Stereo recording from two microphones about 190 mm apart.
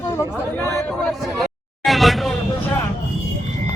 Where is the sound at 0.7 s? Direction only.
Centre (ahead or behind).